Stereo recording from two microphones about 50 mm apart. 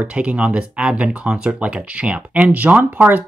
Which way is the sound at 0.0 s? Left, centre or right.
Right.